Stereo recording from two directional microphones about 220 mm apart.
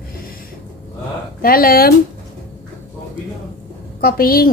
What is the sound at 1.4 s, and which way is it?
Speech, 40° left (ahead or behind).